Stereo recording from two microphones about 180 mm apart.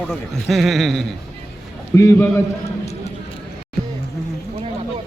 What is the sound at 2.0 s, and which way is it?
Speech, 15° left (ahead or behind).